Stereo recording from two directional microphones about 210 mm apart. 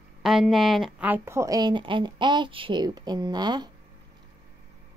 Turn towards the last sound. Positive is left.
turn(degrees=-20)  # may be behind; listen again after turning